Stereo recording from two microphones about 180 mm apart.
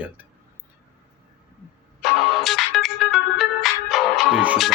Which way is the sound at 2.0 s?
Centre (ahead or behind).